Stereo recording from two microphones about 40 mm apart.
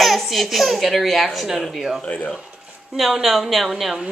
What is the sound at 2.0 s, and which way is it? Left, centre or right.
Speech, left.